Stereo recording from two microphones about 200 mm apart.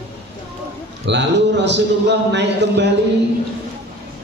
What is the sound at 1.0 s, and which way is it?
Speech, 60° right (ahead or behind).